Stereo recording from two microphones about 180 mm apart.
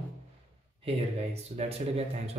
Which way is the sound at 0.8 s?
35° right (ahead or behind).